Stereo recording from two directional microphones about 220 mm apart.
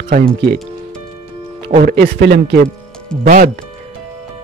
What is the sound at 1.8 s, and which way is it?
Speech, 45° right (ahead or behind).